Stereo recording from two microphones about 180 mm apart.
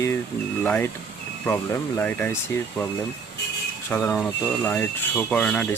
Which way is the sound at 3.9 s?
5° left (ahead or behind).